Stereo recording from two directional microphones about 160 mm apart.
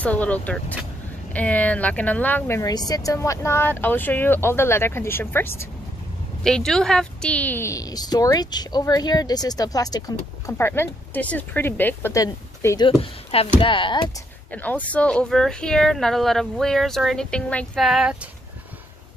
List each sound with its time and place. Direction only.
0.0 s speech: 10° left (ahead or behind)
6.4 s a woman's voice: 5° left (ahead or behind); by 12.9 s 25° left (ahead or behind)
13.0 s speech: 35° left (ahead or behind)
14.5 s speech: 10° left (ahead or behind)